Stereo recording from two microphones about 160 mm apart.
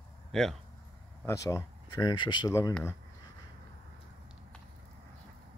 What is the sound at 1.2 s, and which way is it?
Speech, 20° left (ahead or behind).